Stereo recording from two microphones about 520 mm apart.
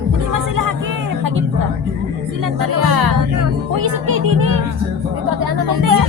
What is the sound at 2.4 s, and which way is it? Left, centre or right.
Music, right.